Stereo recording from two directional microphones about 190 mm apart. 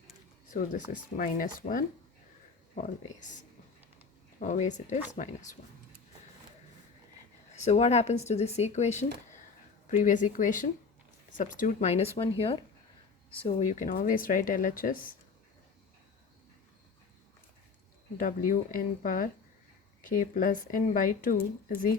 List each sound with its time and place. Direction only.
0.5 s speech: 45° left (ahead or behind)
7.5 s speech: 35° left (ahead or behind)
18.2 s speech: 45° left (ahead or behind)